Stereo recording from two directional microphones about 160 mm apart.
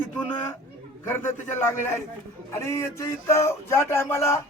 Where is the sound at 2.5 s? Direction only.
15° left (ahead or behind).